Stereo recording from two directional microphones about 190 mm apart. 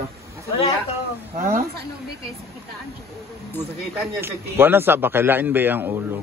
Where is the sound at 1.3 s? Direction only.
45° right (ahead or behind).